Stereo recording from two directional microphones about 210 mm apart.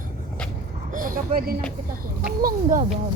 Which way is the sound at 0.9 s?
40° right (ahead or behind).